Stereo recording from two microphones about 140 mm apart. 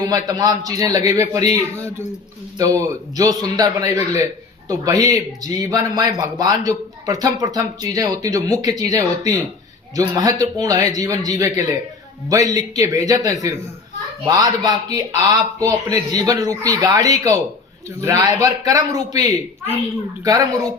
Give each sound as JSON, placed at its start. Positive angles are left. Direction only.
{"t": 0.0, "sound": "speech", "side_deg": -25}
{"t": 2.6, "sound": "speech", "side_deg": -25}